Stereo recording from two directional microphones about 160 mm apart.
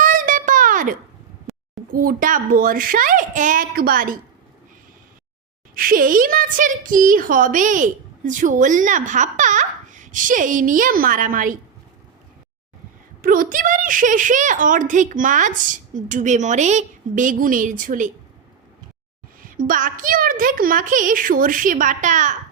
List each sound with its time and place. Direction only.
0.0 s a sound: 55° right (ahead or behind)
1.5 s a sound: centre (ahead or behind)
1.9 s a woman's voice: 60° right (ahead or behind)
5.7 s a woman's voice: 60° right (ahead or behind)
13.2 s a woman's voice: 60° right (ahead or behind)
19.4 s a woman's voice: 60° right (ahead or behind)